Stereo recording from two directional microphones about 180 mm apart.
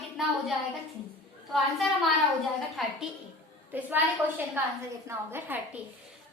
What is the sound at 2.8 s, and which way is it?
Speech, centre (ahead or behind).